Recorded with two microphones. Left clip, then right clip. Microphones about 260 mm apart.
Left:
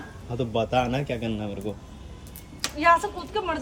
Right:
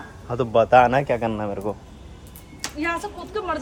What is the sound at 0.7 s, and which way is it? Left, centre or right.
A man's voice, centre.